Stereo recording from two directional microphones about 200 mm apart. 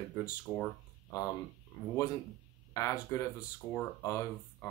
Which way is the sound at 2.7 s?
15° left (ahead or behind).